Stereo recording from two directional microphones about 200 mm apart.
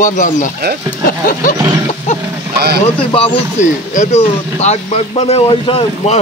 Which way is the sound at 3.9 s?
35° left (ahead or behind).